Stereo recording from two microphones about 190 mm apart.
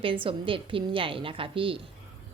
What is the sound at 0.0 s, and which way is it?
A woman's voice, 25° right (ahead or behind).